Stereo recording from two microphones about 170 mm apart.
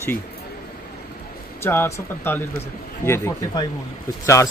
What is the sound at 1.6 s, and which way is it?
Speech, 15° left (ahead or behind).